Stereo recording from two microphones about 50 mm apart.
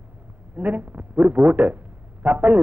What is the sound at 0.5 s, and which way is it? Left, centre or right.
Speech, right.